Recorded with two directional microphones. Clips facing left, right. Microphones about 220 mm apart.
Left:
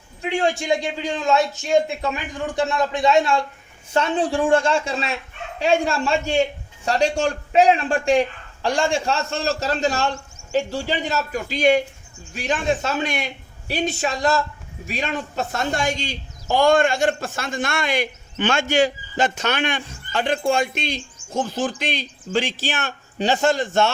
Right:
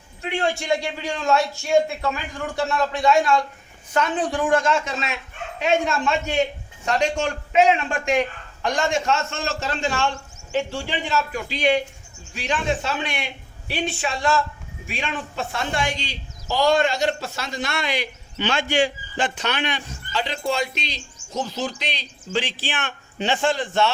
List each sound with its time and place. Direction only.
0.2 s a man's voice: 15° left (ahead or behind); by 23.9 s 45° left (ahead or behind)